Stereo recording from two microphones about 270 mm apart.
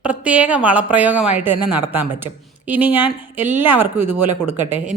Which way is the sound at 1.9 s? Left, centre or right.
Centre.